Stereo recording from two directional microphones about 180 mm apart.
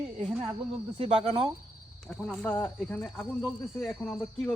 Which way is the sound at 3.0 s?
Centre (ahead or behind).